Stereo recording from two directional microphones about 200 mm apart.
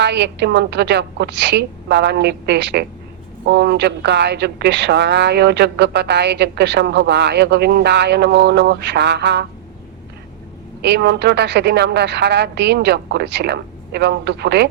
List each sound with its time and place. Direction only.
0.0 s a woman's voice: 55° right (ahead or behind)
10.8 s a woman's voice: 55° right (ahead or behind)